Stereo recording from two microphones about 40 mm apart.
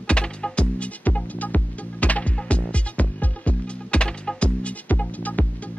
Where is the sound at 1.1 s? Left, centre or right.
Left.